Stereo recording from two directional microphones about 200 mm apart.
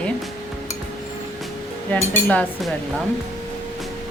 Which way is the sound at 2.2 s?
5° left (ahead or behind).